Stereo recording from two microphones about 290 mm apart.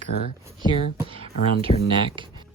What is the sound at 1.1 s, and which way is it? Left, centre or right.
Speech, centre.